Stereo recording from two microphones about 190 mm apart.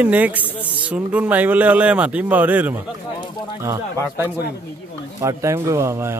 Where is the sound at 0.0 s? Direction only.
10° right (ahead or behind).